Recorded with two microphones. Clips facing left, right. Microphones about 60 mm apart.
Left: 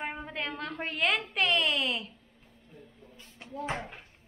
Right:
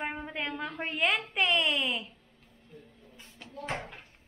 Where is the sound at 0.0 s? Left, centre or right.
Centre.